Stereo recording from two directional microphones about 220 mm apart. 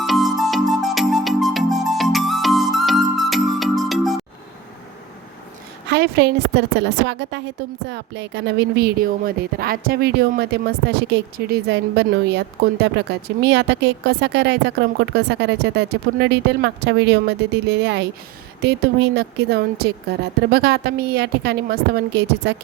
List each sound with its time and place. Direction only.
0.0 s music: centre (ahead or behind)
5.9 s speech: 50° right (ahead or behind)